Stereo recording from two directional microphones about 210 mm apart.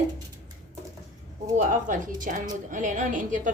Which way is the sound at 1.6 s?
40° right (ahead or behind).